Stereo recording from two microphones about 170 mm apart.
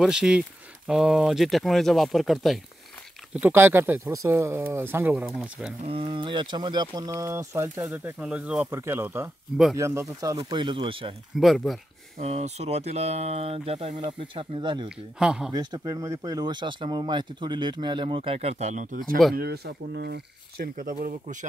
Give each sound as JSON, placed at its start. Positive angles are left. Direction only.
{"t": 0.0, "sound": "speech", "side_deg": -5}
{"t": 3.3, "sound": "speech", "side_deg": -10}
{"t": 5.1, "sound": "speech", "side_deg": 0}
{"t": 5.9, "sound": "speech", "side_deg": -35}
{"t": 11.3, "sound": "speech", "side_deg": 0}
{"t": 12.2, "sound": "speech", "side_deg": -40}
{"t": 14.9, "sound": "speech", "side_deg": -5}
{"t": 15.5, "sound": "speech", "side_deg": -25}
{"t": 19.3, "sound": "speech", "side_deg": -70}
{"t": 21.0, "sound": "speech", "side_deg": -50}